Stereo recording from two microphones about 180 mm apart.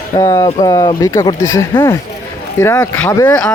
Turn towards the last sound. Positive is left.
turn(degrees=20)  # may be behind; listen again after turning